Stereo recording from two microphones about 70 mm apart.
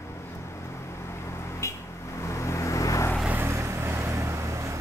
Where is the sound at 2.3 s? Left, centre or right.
Left.